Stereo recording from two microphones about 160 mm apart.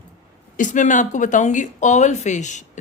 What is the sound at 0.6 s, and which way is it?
Speech, 50° left (ahead or behind).